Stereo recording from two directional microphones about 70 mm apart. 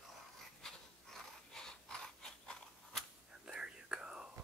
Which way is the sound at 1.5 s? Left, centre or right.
Centre.